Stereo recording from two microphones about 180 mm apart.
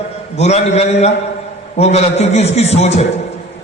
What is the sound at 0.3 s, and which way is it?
A man's voice, 35° left (ahead or behind).